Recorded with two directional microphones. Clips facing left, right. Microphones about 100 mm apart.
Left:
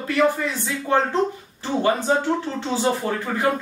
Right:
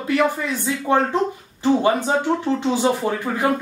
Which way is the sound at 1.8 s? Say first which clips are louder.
Right 1 dB; 15° right (ahead or behind).